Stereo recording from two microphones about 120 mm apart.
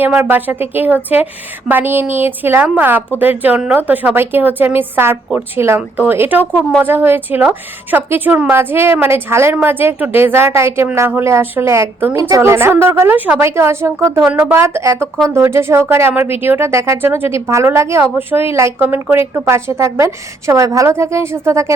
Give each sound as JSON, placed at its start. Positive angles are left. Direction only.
{"t": 0.0, "sound": "a woman's voice", "side_deg": -15}